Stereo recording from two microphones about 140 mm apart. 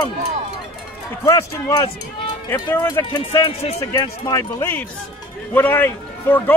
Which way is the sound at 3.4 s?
45° left (ahead or behind).